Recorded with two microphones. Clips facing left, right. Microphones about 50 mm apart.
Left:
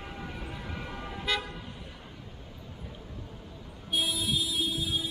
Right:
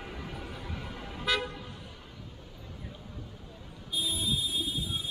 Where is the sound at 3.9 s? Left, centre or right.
Left.